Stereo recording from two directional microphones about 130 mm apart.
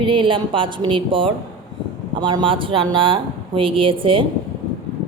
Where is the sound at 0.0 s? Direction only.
40° right (ahead or behind).